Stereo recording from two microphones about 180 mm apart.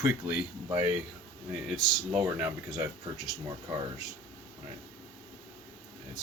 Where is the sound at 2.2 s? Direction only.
15° right (ahead or behind).